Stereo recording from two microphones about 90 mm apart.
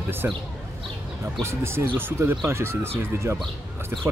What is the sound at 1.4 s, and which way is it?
Speech, 30° right (ahead or behind).